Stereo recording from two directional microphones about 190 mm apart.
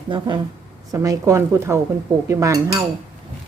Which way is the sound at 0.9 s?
15° right (ahead or behind).